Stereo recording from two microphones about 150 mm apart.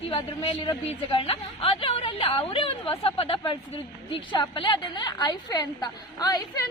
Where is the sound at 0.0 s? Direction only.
40° left (ahead or behind).